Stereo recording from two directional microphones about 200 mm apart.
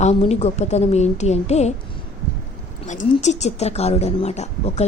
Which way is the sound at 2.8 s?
35° left (ahead or behind).